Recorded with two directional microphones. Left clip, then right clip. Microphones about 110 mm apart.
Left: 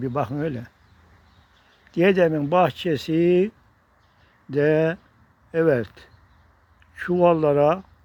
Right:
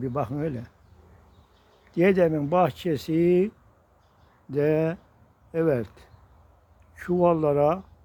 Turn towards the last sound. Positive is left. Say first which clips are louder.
# left 4 dB
turn(degrees=15)  # may be behind; listen again after turning